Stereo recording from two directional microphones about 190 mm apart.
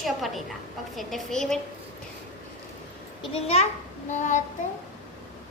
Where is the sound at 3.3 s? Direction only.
35° left (ahead or behind).